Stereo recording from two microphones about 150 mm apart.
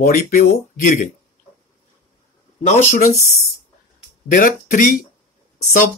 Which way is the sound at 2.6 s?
50° left (ahead or behind).